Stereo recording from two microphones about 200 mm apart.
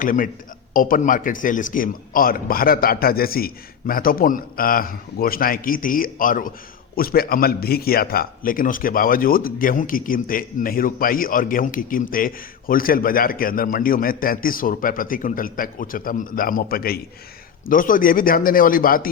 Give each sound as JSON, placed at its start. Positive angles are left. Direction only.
{"t": 0.0, "sound": "a man's voice", "side_deg": 45}